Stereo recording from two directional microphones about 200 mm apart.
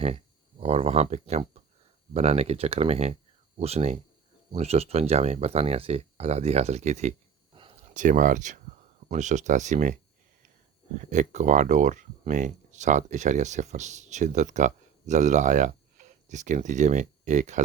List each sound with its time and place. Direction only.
0.6 s speech: 30° right (ahead or behind)
7.5 s a sound: 25° right (ahead or behind)
7.9 s speech: 40° right (ahead or behind)
11.1 s speech: 35° right (ahead or behind)